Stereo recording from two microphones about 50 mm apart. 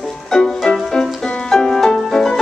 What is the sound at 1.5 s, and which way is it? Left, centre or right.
Music, centre.